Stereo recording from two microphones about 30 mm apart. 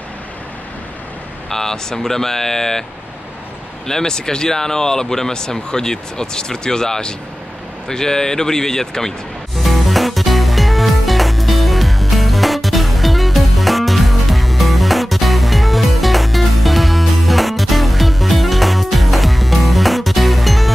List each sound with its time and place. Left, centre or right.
1.5 s speech: centre
3.8 s speech: centre
9.6 s music: centre